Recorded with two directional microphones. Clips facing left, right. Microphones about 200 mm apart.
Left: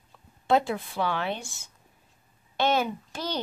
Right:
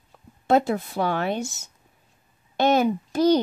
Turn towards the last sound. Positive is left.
turn(degrees=-40)  # may be behind; listen again after turning